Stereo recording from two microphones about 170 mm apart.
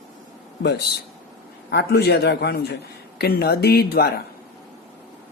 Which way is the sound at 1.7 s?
75° left (ahead or behind).